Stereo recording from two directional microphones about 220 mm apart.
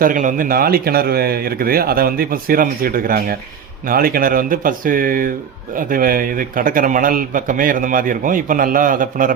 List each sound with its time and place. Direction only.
0.0 s a man's voice: 35° right (ahead or behind)